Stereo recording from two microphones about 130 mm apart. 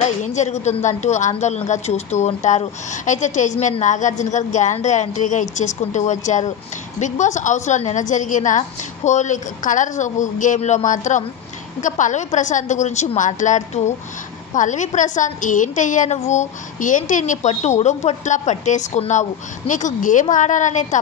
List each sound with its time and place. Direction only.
0.0 s a woman's voice: 65° left (ahead or behind)
19.7 s a woman's voice: 80° left